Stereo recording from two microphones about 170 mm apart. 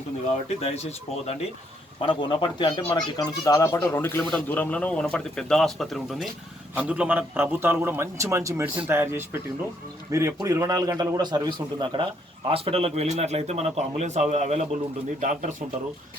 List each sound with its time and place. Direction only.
0.6 s speech: 40° left (ahead or behind)
2.0 s a man's voice: 30° left (ahead or behind); by 15.5 s 50° right (ahead or behind)